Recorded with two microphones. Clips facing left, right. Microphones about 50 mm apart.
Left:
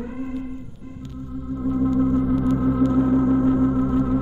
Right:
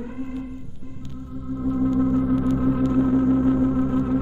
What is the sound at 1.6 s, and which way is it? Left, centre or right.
Organ, centre.